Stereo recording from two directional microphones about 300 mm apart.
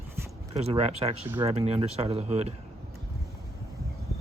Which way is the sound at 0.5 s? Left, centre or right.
Right.